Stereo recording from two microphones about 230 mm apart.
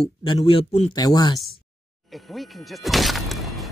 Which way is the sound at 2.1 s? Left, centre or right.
Centre.